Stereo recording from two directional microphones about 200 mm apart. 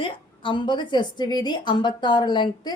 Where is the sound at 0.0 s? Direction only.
25° left (ahead or behind).